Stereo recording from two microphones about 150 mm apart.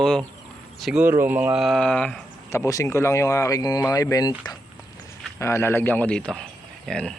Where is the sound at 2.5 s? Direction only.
20° left (ahead or behind).